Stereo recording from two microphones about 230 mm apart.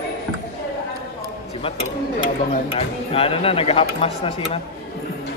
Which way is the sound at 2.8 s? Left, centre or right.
Left.